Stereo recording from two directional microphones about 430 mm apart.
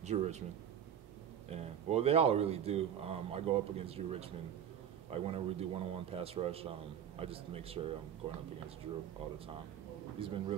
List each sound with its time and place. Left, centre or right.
0.0 s speech: centre
1.5 s a man's voice: centre
10.1 s a man's voice: centre